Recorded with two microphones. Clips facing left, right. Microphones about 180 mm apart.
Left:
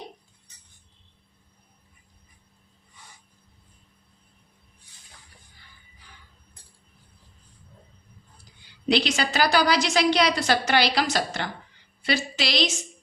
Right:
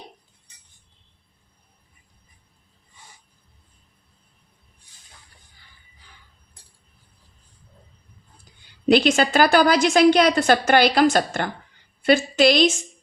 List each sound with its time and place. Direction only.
8.9 s a woman's voice: 50° right (ahead or behind)